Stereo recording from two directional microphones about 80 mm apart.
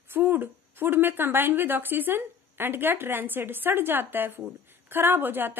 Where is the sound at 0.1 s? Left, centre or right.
Right.